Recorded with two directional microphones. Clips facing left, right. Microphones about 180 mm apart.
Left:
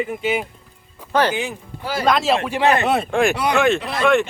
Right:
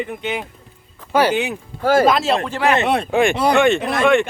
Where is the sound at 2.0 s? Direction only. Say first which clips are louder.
Right 2 dB; centre (ahead or behind).